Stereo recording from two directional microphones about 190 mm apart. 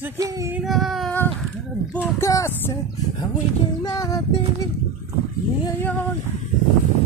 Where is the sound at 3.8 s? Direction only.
20° left (ahead or behind).